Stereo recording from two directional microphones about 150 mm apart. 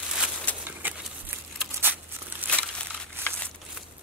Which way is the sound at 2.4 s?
10° left (ahead or behind).